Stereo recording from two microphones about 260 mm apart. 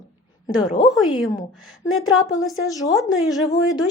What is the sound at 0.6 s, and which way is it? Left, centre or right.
Speech, centre.